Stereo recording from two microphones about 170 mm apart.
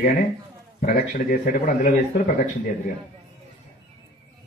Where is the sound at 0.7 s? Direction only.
55° left (ahead or behind).